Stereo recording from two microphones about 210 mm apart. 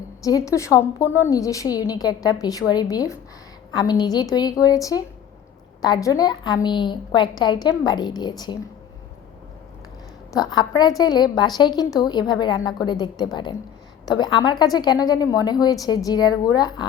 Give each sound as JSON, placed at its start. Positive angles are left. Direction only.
{"t": 0.3, "sound": "a woman's voice", "side_deg": 15}
{"t": 10.3, "sound": "a woman's voice", "side_deg": 20}